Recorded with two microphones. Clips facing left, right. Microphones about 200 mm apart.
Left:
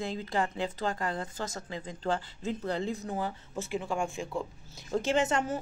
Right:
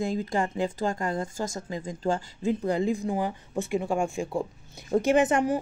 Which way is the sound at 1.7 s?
40° right (ahead or behind).